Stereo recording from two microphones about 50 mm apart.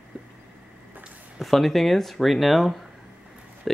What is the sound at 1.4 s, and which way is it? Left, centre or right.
Speech, centre.